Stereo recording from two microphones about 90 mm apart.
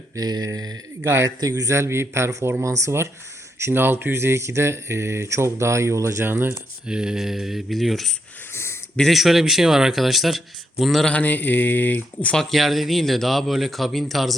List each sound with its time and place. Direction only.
0.2 s a sound: 45° right (ahead or behind)
1.0 s speech: 25° right (ahead or behind)
1.4 s speech: 45° right (ahead or behind); by 6.5 s 25° right (ahead or behind)
6.8 s speech: 10° right (ahead or behind)
8.5 s a sound: 30° left (ahead or behind)
9.0 s speech: centre (ahead or behind)
11.1 s speech: 20° left (ahead or behind)
12.4 s speech: centre (ahead or behind)